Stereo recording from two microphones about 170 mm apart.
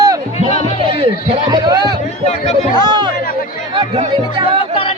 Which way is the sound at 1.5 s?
25° right (ahead or behind).